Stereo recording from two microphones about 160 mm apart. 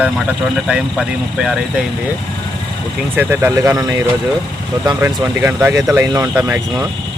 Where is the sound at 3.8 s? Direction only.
20° right (ahead or behind).